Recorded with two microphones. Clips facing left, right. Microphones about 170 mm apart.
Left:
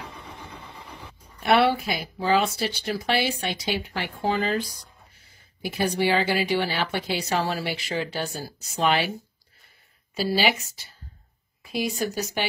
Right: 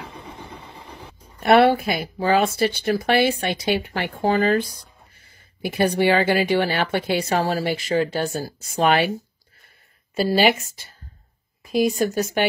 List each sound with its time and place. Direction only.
1.4 s a woman's voice: 50° right (ahead or behind)
10.1 s a woman's voice: 50° right (ahead or behind)